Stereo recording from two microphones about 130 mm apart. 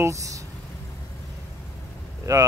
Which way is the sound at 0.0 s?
25° right (ahead or behind).